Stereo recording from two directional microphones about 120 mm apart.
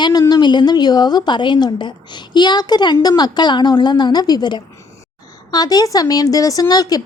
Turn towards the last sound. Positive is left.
turn(degrees=30)  # may be behind; listen again after turning